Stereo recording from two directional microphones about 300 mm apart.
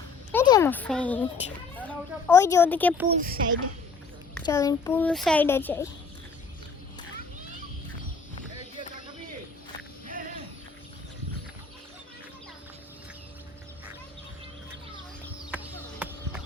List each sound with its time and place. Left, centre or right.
0.3 s speech: centre
3.1 s speech: right
4.4 s a child's voice: centre
15.4 s a sound: centre